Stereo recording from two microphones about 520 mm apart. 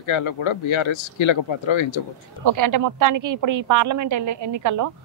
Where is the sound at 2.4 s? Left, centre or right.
Right.